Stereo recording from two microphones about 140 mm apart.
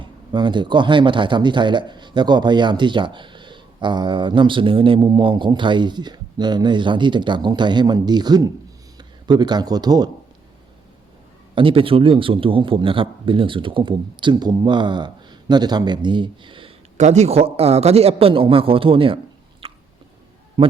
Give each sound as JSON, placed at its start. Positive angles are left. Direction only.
{"t": 0.0, "sound": "speech", "side_deg": -35}
{"t": 11.5, "sound": "speech", "side_deg": -40}
{"t": 17.0, "sound": "a man's voice", "side_deg": -55}
{"t": 19.6, "sound": "chewing", "side_deg": -40}
{"t": 20.6, "sound": "speech", "side_deg": -35}